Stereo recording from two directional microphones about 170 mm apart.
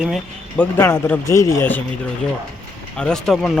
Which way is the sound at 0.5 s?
10° left (ahead or behind).